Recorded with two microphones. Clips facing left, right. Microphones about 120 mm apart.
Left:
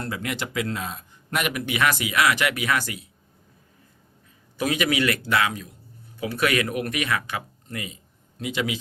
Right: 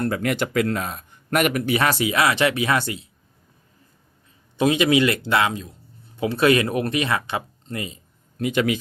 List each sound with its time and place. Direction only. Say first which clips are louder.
0.0 s speech: right 7 dB; 50° right (ahead or behind); by 3.1 s 30° right (ahead or behind)
4.5 s speech: right 6 dB; 25° right (ahead or behind)
8.4 s a man's voice: right 6 dB; 50° right (ahead or behind)